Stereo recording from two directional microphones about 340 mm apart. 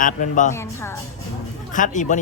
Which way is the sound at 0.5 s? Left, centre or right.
Centre.